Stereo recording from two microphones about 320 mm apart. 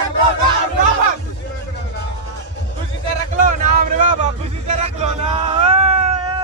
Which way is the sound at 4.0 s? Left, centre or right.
Right.